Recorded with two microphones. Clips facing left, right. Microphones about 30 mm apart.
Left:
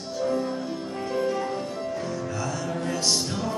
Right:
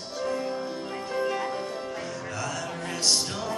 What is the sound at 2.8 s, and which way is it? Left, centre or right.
Music, right.